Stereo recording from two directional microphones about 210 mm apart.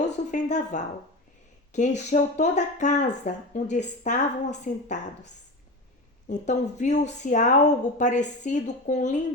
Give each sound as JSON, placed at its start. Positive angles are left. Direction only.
{"t": 0.0, "sound": "a woman's voice", "side_deg": 35}